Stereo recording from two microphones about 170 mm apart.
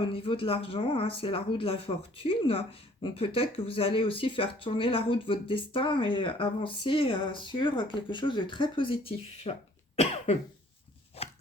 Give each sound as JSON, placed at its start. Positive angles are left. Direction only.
{"t": 0.0, "sound": "speech", "side_deg": 30}
{"t": 11.2, "sound": "chopping", "side_deg": 35}